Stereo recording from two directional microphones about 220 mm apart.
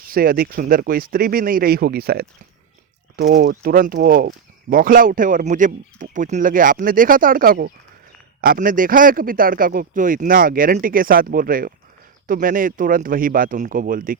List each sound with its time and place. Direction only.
0.1 s speech: 40° right (ahead or behind)